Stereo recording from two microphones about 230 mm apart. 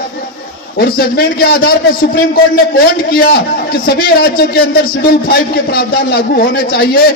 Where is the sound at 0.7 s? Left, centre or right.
Left.